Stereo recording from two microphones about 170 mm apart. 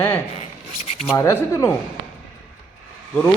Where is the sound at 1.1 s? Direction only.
15° left (ahead or behind).